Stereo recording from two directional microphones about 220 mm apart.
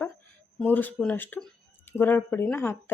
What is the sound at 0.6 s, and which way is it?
A woman's voice, 10° left (ahead or behind).